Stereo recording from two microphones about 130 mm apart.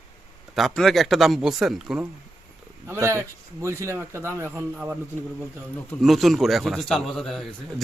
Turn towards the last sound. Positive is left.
turn(degrees=0)  # may be behind; listen again after turning